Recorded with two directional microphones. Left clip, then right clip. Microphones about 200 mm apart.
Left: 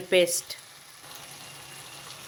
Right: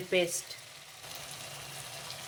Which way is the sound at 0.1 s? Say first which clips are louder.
Left 7 dB; 50° left (ahead or behind).